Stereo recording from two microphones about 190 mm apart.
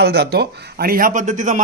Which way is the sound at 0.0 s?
55° right (ahead or behind).